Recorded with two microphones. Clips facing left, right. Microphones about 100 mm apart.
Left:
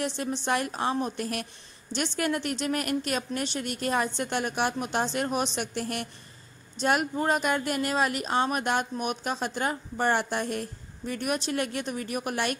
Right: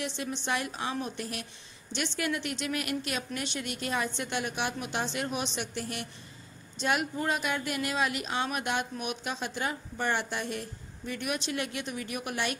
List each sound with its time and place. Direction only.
0.0 s speech: 45° left (ahead or behind)